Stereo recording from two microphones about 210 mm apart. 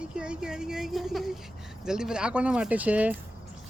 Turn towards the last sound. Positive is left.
turn(degrees=-5)  # may be behind; listen again after turning